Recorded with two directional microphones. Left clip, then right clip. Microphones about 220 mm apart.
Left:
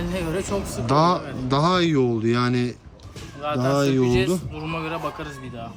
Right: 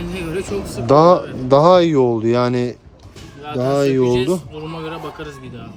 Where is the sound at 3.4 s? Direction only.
45° left (ahead or behind).